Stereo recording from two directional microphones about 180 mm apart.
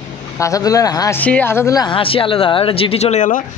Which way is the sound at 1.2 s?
10° left (ahead or behind).